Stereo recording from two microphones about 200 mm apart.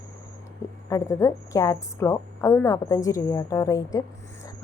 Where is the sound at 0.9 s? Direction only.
15° left (ahead or behind).